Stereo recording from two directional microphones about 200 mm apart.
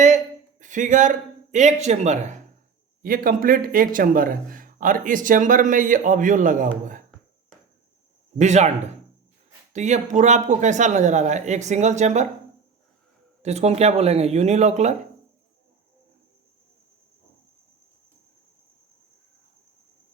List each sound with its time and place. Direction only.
0.6 s speech: 40° right (ahead or behind)
8.4 s speech: 35° right (ahead or behind)
9.7 s speech: 35° right (ahead or behind)
13.4 s speech: 35° right (ahead or behind)